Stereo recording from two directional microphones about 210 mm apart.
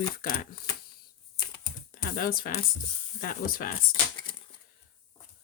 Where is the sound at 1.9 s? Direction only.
45° left (ahead or behind).